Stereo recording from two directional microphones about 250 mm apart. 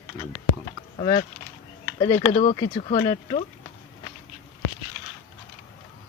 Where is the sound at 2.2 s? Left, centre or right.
Left.